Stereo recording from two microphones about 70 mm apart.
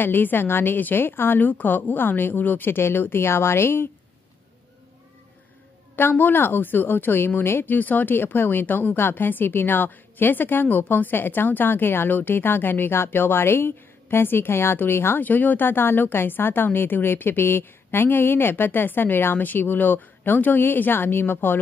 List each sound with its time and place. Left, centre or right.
0.0 s a woman's voice: left
5.9 s a woman's voice: left